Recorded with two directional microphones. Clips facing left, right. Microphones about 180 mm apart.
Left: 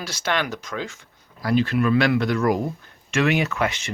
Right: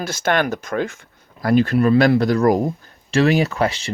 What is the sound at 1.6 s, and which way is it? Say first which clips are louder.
Speech: right 5 dB; 35° right (ahead or behind).